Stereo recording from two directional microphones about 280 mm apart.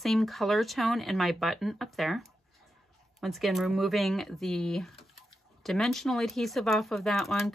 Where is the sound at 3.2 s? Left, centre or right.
Centre.